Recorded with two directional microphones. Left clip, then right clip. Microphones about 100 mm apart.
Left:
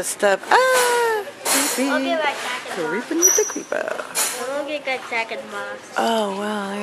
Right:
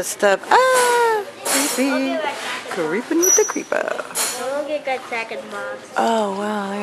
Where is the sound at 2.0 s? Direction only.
20° left (ahead or behind).